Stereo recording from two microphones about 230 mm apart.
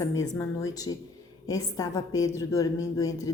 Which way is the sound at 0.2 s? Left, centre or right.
Centre.